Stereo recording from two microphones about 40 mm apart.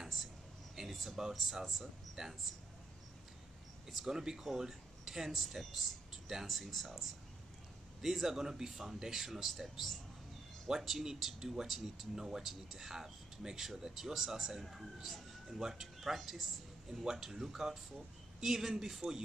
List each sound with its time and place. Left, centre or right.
0.7 s a sound: centre
1.3 s speech: centre
3.9 s speech: centre
8.0 s speech: centre
14.6 s speech: centre